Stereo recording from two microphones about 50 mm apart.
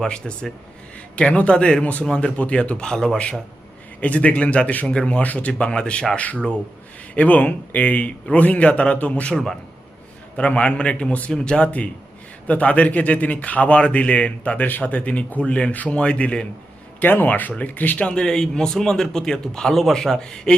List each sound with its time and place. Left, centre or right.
0.0 s a man's voice: centre
2.0 s a man's voice: centre
4.0 s a man's voice: left
7.1 s a man's voice: left
9.3 s a man's voice: centre
10.3 s a man's voice: left
12.5 s a man's voice: left
17.0 s speech: left
18.0 s speech: centre